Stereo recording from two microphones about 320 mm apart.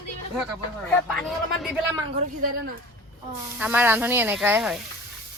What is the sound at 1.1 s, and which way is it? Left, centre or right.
Speech, centre.